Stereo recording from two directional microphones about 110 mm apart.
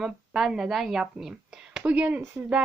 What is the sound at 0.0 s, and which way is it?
A woman's voice, 5° right (ahead or behind).